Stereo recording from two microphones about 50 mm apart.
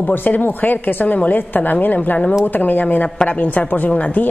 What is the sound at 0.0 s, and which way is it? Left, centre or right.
A woman's voice, left.